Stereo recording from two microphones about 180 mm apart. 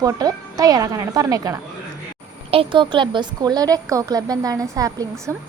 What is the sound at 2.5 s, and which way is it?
A woman's voice, 30° right (ahead or behind).